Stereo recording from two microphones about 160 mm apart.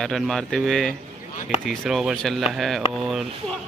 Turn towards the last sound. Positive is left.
turn(degrees=0)  # may be behind; listen again after turning